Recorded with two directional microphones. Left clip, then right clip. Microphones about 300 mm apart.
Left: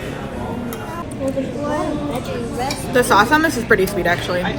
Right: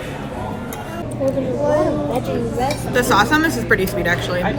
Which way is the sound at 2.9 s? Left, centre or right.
Centre.